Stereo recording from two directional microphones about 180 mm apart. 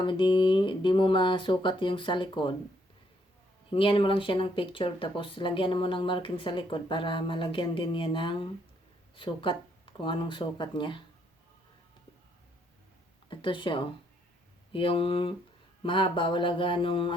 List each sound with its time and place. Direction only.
0.0 s speech: 25° left (ahead or behind)
3.7 s speech: 30° left (ahead or behind)
13.3 s speech: 25° left (ahead or behind)